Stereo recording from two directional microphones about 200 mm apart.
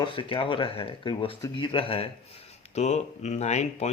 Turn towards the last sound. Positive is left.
turn(degrees=35)  # may be behind; listen again after turning